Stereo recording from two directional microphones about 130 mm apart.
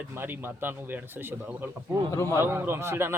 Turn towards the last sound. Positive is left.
turn(degrees=-20)  # may be behind; listen again after turning